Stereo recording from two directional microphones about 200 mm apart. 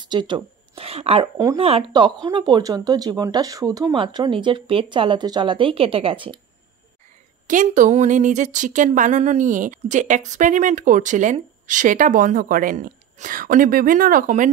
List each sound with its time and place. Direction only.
0.0 s speech: 20° right (ahead or behind)
7.4 s speech: 40° right (ahead or behind)